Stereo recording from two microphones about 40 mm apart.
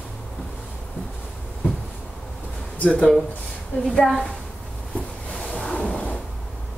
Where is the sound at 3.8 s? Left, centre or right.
Centre.